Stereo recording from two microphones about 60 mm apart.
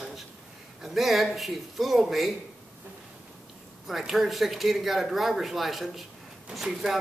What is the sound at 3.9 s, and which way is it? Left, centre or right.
Speech, centre.